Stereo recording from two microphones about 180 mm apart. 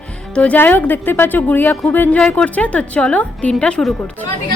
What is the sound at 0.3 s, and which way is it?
A woman's voice, 10° left (ahead or behind).